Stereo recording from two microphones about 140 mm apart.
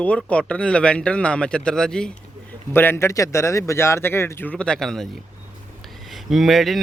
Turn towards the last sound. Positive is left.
turn(degrees=0)  # may be behind; listen again after turning